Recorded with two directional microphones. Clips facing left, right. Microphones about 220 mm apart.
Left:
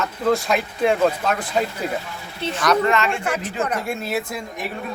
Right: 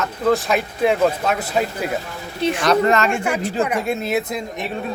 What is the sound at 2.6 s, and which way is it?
Speech, 30° right (ahead or behind).